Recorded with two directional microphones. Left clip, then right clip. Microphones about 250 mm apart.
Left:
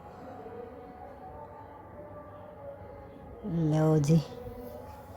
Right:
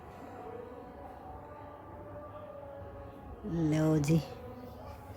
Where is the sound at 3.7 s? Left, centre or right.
Centre.